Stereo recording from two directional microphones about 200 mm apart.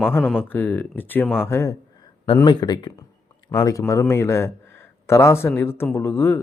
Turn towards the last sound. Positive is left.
turn(degrees=10)  # may be behind; listen again after turning